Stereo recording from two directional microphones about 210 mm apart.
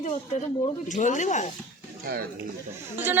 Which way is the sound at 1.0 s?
35° left (ahead or behind).